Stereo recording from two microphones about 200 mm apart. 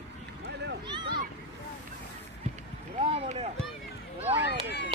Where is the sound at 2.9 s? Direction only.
30° right (ahead or behind).